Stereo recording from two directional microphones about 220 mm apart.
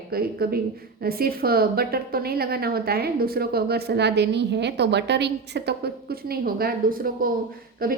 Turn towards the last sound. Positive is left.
turn(degrees=-40)  # may be behind; listen again after turning